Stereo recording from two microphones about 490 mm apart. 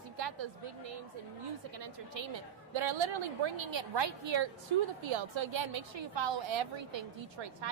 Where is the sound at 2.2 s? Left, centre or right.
Right.